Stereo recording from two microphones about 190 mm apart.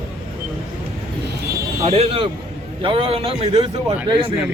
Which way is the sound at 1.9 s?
30° right (ahead or behind).